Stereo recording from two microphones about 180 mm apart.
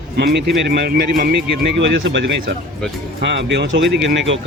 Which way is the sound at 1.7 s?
85° right.